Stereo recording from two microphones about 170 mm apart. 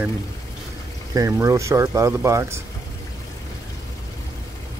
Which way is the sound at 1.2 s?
20° right (ahead or behind).